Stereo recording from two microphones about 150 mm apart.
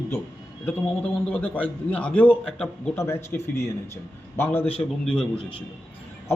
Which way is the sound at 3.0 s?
15° left (ahead or behind).